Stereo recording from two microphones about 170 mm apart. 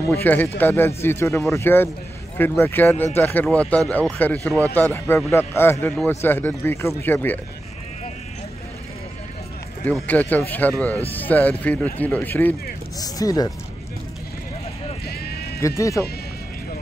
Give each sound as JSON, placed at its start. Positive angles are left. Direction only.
{"t": 0.1, "sound": "speech", "side_deg": 10}
{"t": 9.8, "sound": "speech", "side_deg": 10}
{"t": 13.0, "sound": "speech", "side_deg": 20}
{"t": 15.6, "sound": "speech", "side_deg": 20}